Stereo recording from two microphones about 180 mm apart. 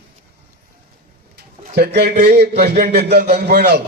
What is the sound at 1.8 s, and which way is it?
A man's voice, 65° right (ahead or behind).